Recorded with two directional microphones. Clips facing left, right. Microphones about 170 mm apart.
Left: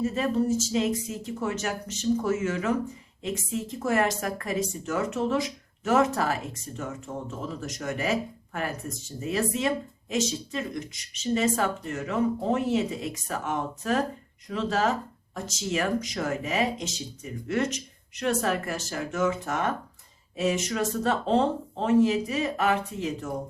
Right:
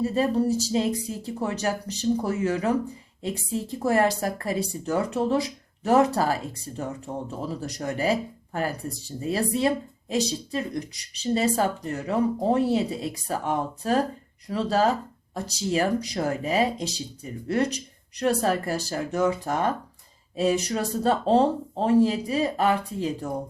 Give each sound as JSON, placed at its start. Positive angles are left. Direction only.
{"t": 0.0, "sound": "speech", "side_deg": -35}